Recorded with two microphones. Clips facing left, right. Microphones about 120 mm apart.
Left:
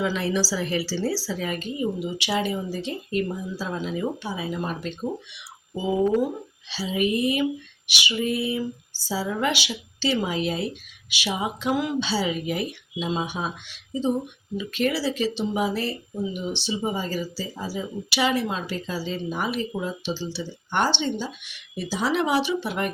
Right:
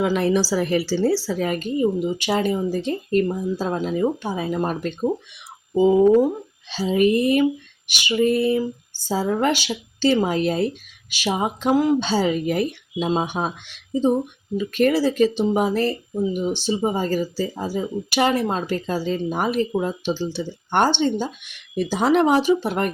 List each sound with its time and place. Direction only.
0.0 s speech: 50° right (ahead or behind)
6.7 s speech: 45° right (ahead or behind)